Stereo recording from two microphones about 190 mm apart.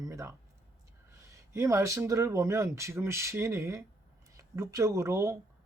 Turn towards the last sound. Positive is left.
turn(degrees=-15)  # may be behind; listen again after turning